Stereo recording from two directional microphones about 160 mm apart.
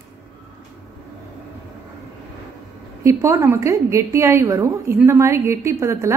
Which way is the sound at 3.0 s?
20° right (ahead or behind).